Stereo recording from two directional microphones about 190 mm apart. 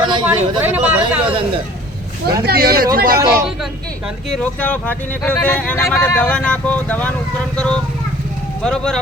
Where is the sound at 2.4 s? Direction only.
55° right (ahead or behind).